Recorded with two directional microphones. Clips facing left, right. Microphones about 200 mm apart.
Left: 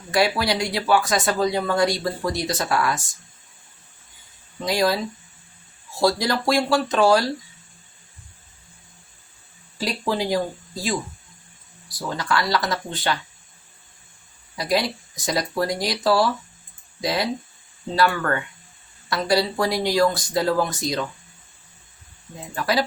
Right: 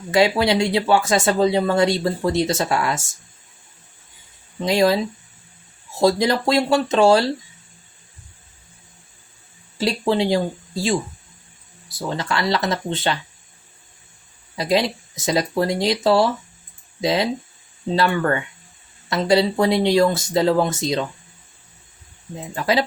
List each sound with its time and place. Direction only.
0.1 s speech: 25° right (ahead or behind)
4.6 s speech: 25° right (ahead or behind)
6.0 s speech: 20° right (ahead or behind)
9.7 s speech: 25° right (ahead or behind)
14.5 s speech: 20° right (ahead or behind)
22.5 s speech: 20° right (ahead or behind)